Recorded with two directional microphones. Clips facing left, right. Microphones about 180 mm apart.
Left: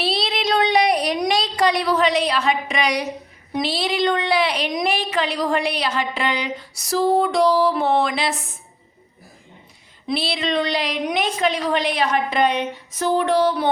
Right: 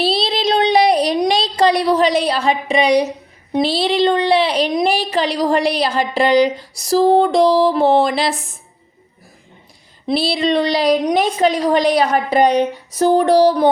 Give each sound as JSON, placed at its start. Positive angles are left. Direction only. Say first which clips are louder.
{"t": 0.0, "sound": "a sound", "louder": "right 5 dB", "side_deg": -30}
{"t": 3.5, "sound": "speech", "louder": "right 6 dB", "side_deg": -30}
{"t": 10.1, "sound": "speech", "louder": "right 6 dB", "side_deg": -35}